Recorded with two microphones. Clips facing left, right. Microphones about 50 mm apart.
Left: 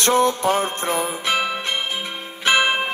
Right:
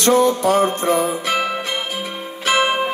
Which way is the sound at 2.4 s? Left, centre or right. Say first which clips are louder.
Even; left.